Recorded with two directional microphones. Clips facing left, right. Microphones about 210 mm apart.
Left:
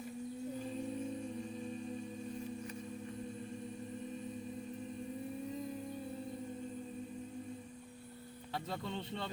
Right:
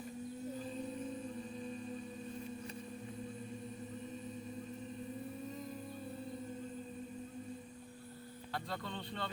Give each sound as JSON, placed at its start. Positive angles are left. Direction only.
{"t": 8.5, "sound": "speech", "side_deg": 25}